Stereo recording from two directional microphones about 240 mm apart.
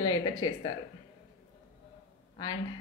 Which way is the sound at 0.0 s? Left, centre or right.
Centre.